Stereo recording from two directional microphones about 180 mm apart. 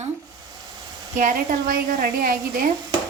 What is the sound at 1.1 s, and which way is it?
A woman's voice, 45° right (ahead or behind).